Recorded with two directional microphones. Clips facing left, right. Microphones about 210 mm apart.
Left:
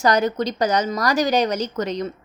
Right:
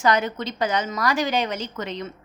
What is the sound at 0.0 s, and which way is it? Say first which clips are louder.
A woman's voice: left 3 dB; 40° left (ahead or behind).